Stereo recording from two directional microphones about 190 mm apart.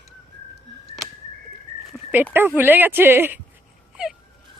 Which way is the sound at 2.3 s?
10° right (ahead or behind).